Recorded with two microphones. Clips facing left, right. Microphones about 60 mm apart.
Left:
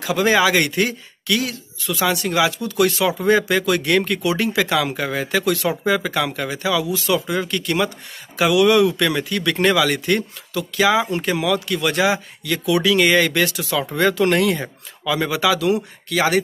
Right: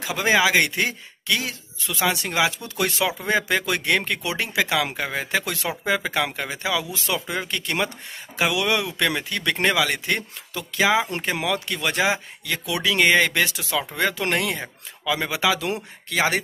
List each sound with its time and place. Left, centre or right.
0.0 s speech: centre